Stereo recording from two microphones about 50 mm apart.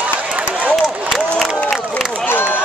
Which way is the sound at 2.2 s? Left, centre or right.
Left.